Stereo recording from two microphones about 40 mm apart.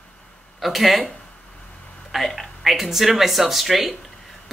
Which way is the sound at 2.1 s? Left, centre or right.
Centre.